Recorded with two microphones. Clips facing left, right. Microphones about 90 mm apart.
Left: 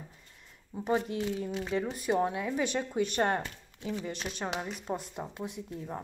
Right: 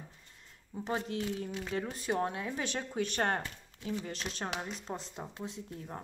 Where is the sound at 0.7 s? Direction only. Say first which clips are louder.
Left 5 dB; 20° left (ahead or behind).